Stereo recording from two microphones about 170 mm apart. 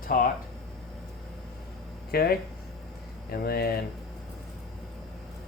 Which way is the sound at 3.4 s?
65° left (ahead or behind).